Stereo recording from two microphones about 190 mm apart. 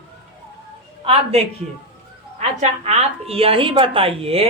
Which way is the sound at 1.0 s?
30° right (ahead or behind).